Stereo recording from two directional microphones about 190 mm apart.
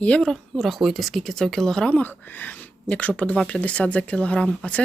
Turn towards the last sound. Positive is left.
turn(degrees=5)  # may be behind; listen again after turning